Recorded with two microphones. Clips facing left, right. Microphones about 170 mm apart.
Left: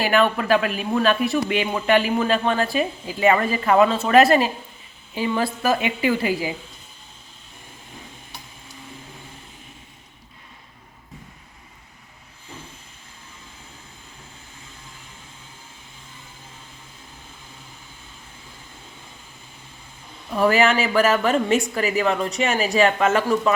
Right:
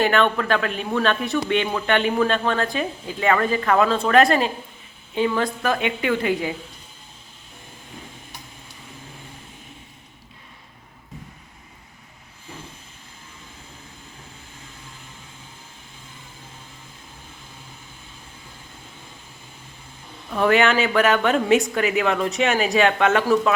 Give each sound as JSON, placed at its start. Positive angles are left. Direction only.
{"t": 0.0, "sound": "a man's voice", "side_deg": 5}
{"t": 20.3, "sound": "a man's voice", "side_deg": 0}